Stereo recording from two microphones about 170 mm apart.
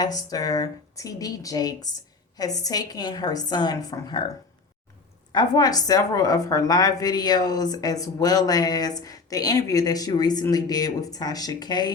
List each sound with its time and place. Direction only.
0.0 s a woman's voice: 20° left (ahead or behind)
5.3 s a woman's voice: 25° left (ahead or behind)